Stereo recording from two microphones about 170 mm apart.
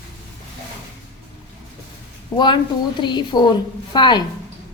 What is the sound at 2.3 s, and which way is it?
A woman's voice, 25° left (ahead or behind).